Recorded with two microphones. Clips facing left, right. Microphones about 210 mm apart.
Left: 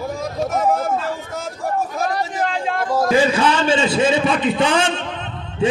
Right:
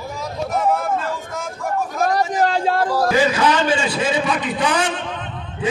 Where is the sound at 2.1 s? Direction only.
35° right (ahead or behind).